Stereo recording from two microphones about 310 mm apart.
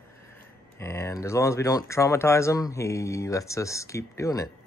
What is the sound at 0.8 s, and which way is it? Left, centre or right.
Speech, centre.